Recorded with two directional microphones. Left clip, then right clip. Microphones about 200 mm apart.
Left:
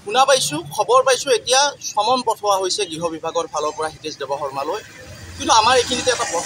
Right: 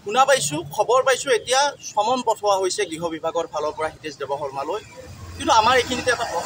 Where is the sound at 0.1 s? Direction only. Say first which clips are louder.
Left 2 dB; 5° right (ahead or behind).